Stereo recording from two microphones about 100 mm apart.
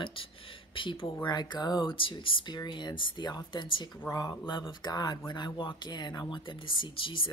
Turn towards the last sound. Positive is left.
turn(degrees=55)  # may be behind; listen again after turning